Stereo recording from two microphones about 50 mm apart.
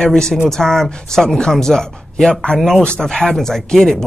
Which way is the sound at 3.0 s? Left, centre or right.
Centre.